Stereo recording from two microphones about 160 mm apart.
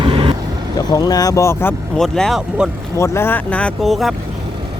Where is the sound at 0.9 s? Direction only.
25° left (ahead or behind).